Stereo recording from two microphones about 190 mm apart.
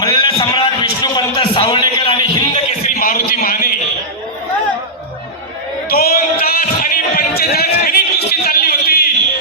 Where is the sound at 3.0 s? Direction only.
50° left (ahead or behind).